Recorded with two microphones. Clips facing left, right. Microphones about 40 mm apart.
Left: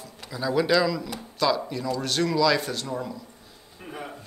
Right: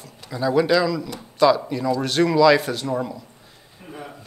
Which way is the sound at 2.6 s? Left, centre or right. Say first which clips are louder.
Right 6 dB; centre.